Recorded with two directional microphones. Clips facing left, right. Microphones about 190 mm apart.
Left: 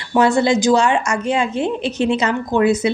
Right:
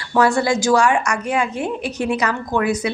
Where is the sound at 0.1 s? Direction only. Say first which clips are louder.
Left 2 dB; 20° left (ahead or behind).